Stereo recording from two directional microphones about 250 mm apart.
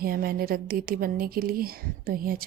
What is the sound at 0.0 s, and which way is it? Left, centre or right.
A woman's voice, right.